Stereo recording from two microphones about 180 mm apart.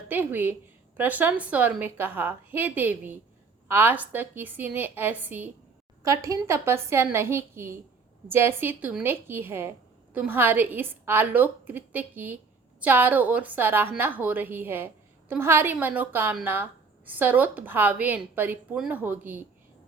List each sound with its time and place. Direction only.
0.1 s a woman's voice: 10° right (ahead or behind)